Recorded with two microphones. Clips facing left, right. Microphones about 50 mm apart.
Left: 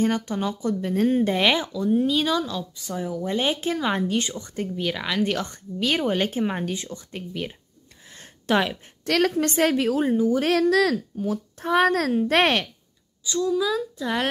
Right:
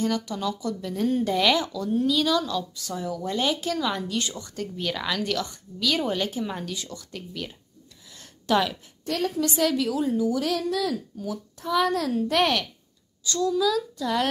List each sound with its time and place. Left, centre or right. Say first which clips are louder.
0.0 s speech: left 3 dB; left
1.7 s speech: left 3 dB; centre
4.7 s speech: left 1 dB; centre
5.2 s speech: left 3 dB; left
8.2 s a sound: left 1 dB; left
9.0 s a woman's voice: left 6 dB; left
9.3 s speech: left 3 dB; left
11.1 s speech: left 5 dB; left
13.2 s speech: even; centre